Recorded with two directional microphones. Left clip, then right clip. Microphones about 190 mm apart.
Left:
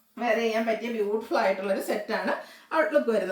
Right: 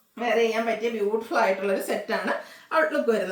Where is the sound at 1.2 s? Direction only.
15° right (ahead or behind).